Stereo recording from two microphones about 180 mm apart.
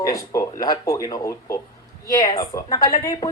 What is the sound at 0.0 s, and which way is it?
Speech, 20° left (ahead or behind).